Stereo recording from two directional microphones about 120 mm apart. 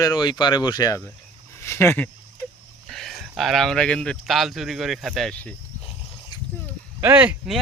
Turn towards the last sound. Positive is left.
turn(degrees=-15)  # may be behind; listen again after turning